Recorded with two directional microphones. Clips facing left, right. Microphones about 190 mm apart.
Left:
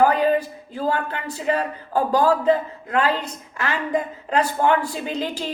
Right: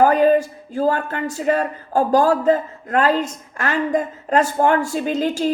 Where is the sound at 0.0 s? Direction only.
45° right (ahead or behind).